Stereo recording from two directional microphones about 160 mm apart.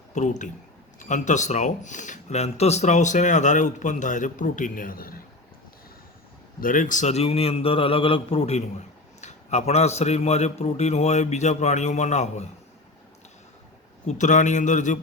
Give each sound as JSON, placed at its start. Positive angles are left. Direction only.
{"t": 0.1, "sound": "speech", "side_deg": 50}
{"t": 6.6, "sound": "a man's voice", "side_deg": 55}
{"t": 14.1, "sound": "speech", "side_deg": 50}